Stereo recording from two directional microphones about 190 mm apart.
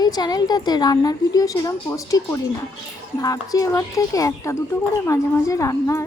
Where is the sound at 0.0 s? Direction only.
20° left (ahead or behind).